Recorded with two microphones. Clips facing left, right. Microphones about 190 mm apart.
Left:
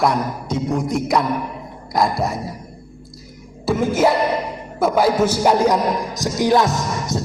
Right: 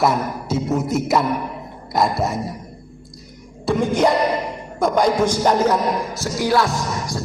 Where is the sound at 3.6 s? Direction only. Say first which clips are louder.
Left 1 dB; 5° left (ahead or behind).